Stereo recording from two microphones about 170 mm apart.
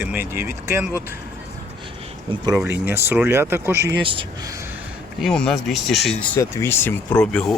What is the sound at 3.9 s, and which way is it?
Speech, 30° right (ahead or behind).